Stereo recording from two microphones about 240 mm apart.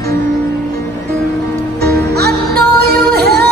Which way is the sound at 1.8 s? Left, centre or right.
Right.